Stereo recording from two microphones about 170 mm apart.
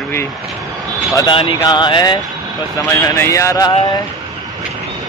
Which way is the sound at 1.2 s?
30° left (ahead or behind).